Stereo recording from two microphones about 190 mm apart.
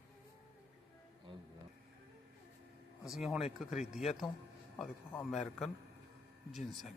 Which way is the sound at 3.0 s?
Centre (ahead or behind).